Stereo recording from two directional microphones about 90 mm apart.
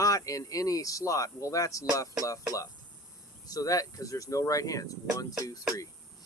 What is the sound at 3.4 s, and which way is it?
Speech, 40° left (ahead or behind).